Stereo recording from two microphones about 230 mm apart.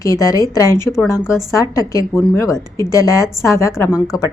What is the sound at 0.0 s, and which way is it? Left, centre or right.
A woman's voice, centre.